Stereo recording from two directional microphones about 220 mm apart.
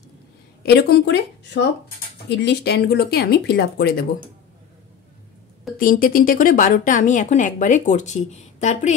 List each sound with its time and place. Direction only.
0.7 s speech: 45° left (ahead or behind)
5.8 s speech: 40° left (ahead or behind)